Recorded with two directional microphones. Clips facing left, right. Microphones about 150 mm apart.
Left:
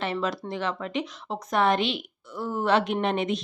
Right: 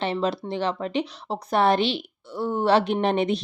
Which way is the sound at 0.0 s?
30° right (ahead or behind).